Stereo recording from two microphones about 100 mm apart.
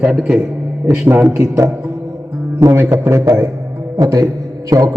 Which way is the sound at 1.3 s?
30° right (ahead or behind).